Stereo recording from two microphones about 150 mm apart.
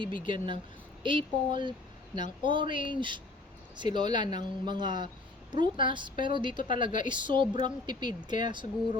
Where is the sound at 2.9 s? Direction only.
30° right (ahead or behind).